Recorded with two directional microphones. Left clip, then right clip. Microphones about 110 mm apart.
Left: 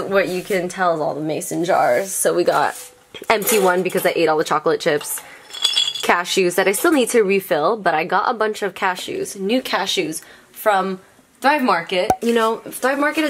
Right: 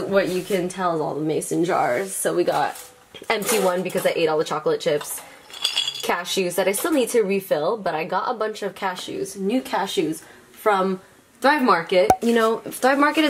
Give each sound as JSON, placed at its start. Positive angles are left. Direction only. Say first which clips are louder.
{"t": 0.1, "sound": "a woman's voice", "louder": "left 2 dB", "side_deg": 40}
{"t": 5.9, "sound": "a woman's voice", "louder": "left 6 dB", "side_deg": 45}
{"t": 10.6, "sound": "speech", "louder": "left 2 dB", "side_deg": 15}
{"t": 11.4, "sound": "speech", "louder": "left 1 dB", "side_deg": 5}
{"t": 12.6, "sound": "speech", "louder": "right 1 dB", "side_deg": -15}